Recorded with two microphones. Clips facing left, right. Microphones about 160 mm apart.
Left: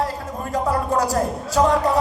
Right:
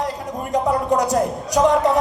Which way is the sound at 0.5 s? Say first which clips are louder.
Right 2 dB; 20° right (ahead or behind).